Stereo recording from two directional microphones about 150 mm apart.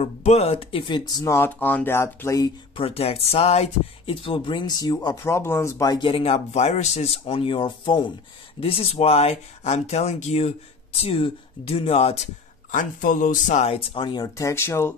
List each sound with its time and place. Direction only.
0.0 s speech: 45° left (ahead or behind); by 2.5 s 20° left (ahead or behind)
2.7 s speech: 40° left (ahead or behind)
12.7 s speech: 65° left (ahead or behind); by 15.0 s 15° left (ahead or behind)